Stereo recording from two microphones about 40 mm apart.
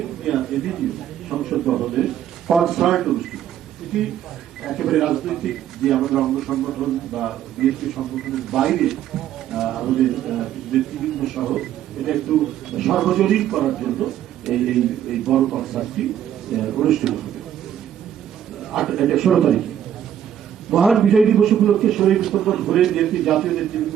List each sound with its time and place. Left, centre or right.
0.0 s a sound: centre
1.3 s a man's voice: centre
18.7 s a man's voice: centre
20.9 s a man's voice: centre